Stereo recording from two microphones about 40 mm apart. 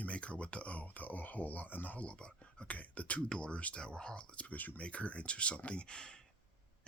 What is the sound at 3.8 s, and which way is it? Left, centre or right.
Speech, left.